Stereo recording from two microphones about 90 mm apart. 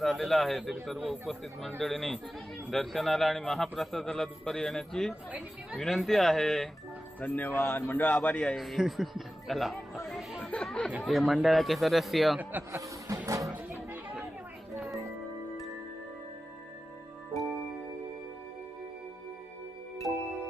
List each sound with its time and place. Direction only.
0.0 s a man's voice: centre (ahead or behind)
7.2 s a man's voice: 20° left (ahead or behind)
8.5 s a man's voice: centre (ahead or behind)
10.1 s music: centre (ahead or behind)
10.7 s a man's voice: 10° left (ahead or behind)
12.4 s speech: 20° right (ahead or behind)
12.8 s music: 35° right (ahead or behind)
13.9 s chatter: 15° right (ahead or behind)